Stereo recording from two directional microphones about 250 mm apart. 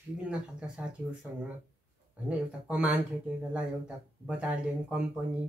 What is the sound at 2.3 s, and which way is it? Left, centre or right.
Speech, centre.